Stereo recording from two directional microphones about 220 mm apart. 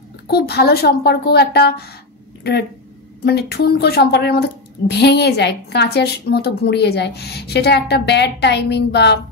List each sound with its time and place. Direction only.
0.3 s a woman's voice: 45° left (ahead or behind)
3.3 s a woman's voice: 45° left (ahead or behind)